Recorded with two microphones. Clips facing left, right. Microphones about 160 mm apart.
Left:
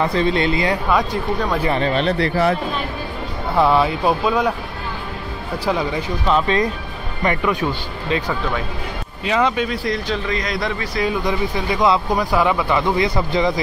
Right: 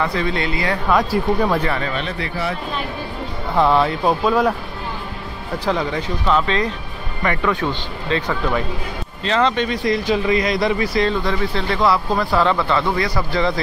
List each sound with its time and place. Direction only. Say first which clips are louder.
0.0 s speech: left 3 dB; 25° left (ahead or behind)
0.8 s speech: right 2 dB; centre (ahead or behind)
1.7 s speech: left 5 dB; 30° left (ahead or behind)
3.5 s speech: even; 5° left (ahead or behind)
5.7 s speech: even; 10° left (ahead or behind)
10.0 s speech: right 5 dB; 10° right (ahead or behind)
11.0 s speech: left 3 dB; 15° left (ahead or behind)